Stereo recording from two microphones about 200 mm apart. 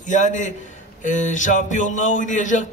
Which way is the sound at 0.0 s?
40° left (ahead or behind).